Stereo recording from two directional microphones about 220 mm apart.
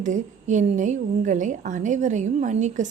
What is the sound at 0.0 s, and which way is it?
A woman's voice, 35° right (ahead or behind).